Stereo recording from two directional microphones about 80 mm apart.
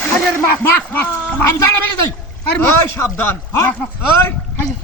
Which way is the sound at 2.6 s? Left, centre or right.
Left.